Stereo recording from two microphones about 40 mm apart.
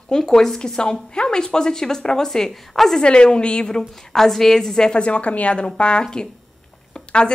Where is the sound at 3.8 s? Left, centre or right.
Centre.